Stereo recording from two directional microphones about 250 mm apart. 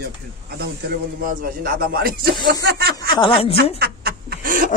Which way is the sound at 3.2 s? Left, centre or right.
Left.